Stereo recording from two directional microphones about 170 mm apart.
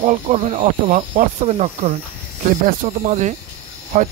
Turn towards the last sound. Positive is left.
turn(degrees=-45)  # may be behind; listen again after turning